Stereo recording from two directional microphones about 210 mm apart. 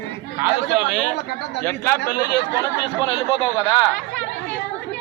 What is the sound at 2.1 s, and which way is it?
Speech, 50° left (ahead or behind).